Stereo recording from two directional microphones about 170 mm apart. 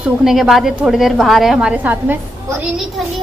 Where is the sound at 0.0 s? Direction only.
Centre (ahead or behind).